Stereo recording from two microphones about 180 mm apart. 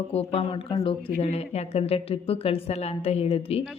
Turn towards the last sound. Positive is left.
turn(degrees=35)  # may be behind; listen again after turning